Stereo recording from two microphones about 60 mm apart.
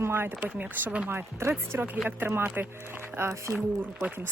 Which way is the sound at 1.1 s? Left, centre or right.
Right.